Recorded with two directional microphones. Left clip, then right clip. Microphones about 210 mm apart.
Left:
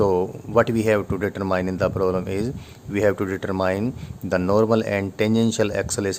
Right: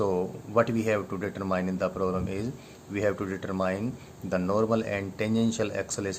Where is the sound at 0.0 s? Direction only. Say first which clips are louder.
Left 8 dB; 50° left (ahead or behind).